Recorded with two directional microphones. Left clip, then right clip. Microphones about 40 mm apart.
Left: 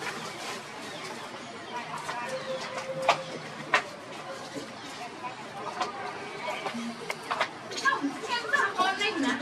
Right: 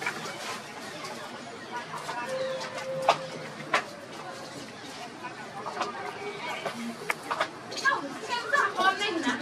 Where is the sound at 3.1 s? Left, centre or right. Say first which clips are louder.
Right 1 dB; centre.